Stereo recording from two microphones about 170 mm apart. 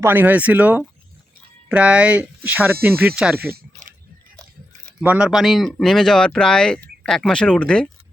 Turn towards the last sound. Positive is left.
turn(degrees=5)  # may be behind; listen again after turning